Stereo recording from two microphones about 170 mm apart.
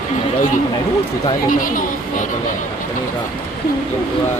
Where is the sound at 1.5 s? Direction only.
50° left (ahead or behind).